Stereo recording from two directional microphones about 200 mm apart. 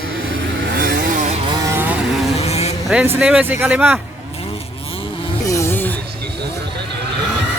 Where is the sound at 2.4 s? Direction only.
30° left (ahead or behind).